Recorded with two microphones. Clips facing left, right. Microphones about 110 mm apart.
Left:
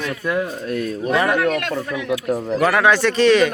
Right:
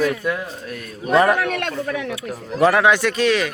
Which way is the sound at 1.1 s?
35° right (ahead or behind).